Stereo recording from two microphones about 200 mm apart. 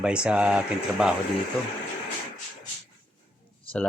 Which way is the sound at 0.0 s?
5° right (ahead or behind).